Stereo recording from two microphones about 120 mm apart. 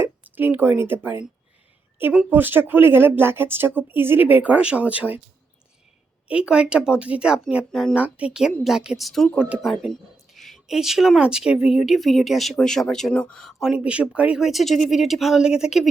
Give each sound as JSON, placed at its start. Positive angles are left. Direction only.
{"t": 0.0, "sound": "a woman's voice", "side_deg": -15}
{"t": 6.2, "sound": "speech", "side_deg": -10}
{"t": 7.9, "sound": "speech", "side_deg": -10}